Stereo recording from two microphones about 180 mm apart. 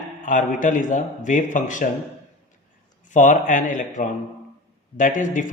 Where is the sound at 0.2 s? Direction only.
45° left (ahead or behind).